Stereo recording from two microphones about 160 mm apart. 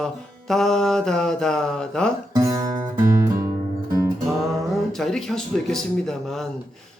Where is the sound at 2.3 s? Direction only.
20° right (ahead or behind).